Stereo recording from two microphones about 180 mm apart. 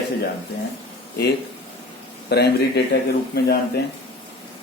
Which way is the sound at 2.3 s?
65° left (ahead or behind).